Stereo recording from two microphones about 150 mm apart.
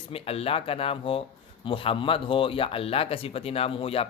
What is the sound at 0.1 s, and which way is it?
Speech, 40° left (ahead or behind).